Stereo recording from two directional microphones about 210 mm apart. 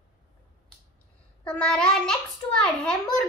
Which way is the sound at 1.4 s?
5° left (ahead or behind).